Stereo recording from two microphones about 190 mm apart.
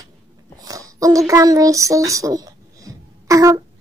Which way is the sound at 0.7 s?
20° right (ahead or behind).